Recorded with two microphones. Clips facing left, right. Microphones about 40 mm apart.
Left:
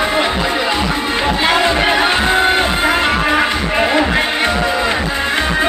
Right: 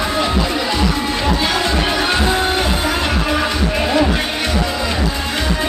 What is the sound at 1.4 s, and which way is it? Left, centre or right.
Music, left.